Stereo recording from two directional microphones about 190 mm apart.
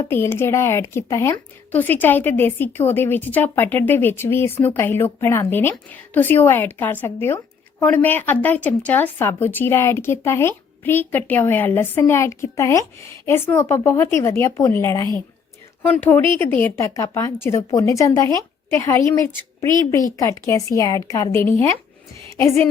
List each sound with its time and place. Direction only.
0.1 s a woman's voice: 10° left (ahead or behind)